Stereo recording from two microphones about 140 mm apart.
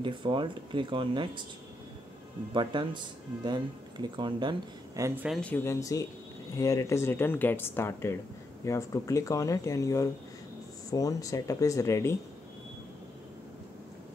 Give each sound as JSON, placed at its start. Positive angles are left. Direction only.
{"t": 0.0, "sound": "speech", "side_deg": -35}
{"t": 2.5, "sound": "speech", "side_deg": -35}
{"t": 5.0, "sound": "speech", "side_deg": -15}
{"t": 5.3, "sound": "speech", "side_deg": 10}